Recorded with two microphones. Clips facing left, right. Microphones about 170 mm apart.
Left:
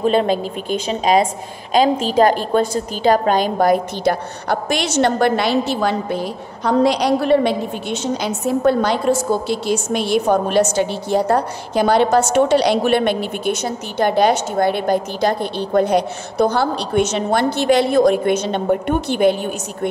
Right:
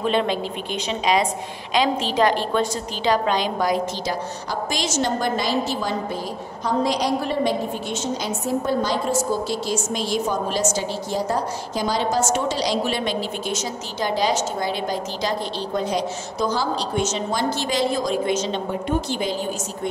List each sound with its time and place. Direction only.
0.0 s a woman's voice: 40° left (ahead or behind); by 19.9 s 60° left (ahead or behind)